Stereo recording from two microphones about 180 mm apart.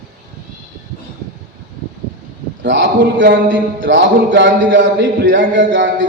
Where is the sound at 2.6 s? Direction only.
90° right.